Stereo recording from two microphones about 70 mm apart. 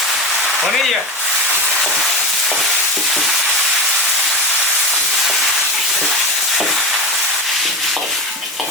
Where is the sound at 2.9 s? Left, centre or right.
Centre.